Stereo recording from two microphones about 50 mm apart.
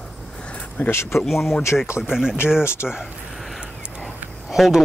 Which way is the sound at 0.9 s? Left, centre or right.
Left.